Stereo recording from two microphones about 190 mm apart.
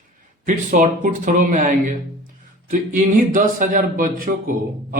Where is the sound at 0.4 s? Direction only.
40° right (ahead or behind).